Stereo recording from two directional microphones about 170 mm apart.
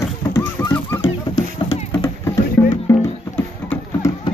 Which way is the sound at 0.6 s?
20° left (ahead or behind).